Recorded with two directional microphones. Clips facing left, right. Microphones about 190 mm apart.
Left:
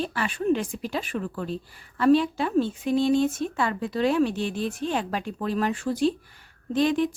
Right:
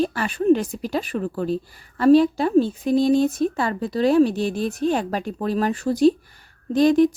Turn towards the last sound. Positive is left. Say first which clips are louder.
# right 7 dB
turn(degrees=-40)  # may be behind; listen again after turning